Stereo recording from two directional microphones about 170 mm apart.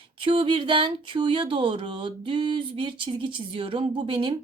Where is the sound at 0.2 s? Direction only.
30° right (ahead or behind).